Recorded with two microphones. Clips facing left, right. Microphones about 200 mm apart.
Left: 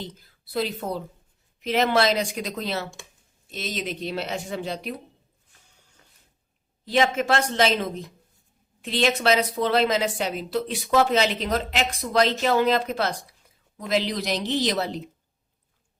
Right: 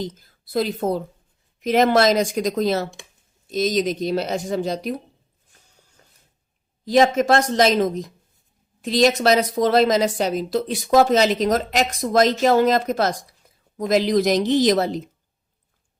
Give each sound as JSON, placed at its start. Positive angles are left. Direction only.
{"t": 0.0, "sound": "a woman's voice", "side_deg": -45}
{"t": 6.0, "sound": "a sound", "side_deg": -40}
{"t": 6.8, "sound": "a woman's voice", "side_deg": -40}